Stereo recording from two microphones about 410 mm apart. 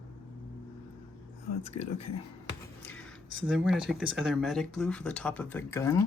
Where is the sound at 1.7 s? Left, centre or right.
Left.